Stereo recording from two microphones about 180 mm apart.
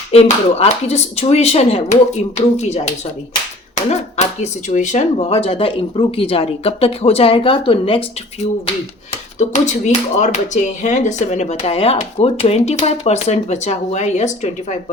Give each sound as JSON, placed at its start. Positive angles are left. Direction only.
{"t": 0.1, "sound": "speech", "side_deg": 35}
{"t": 9.4, "sound": "speech", "side_deg": 40}